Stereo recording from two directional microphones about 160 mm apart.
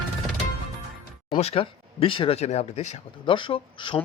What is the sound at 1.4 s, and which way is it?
Speech, 40° left (ahead or behind).